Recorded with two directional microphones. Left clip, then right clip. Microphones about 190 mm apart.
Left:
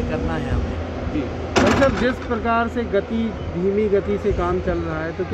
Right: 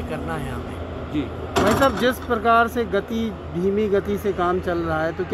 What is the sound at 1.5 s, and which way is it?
Speech, 30° left (ahead or behind).